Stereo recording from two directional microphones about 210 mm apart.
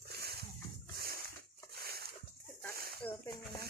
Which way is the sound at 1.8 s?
50° right (ahead or behind).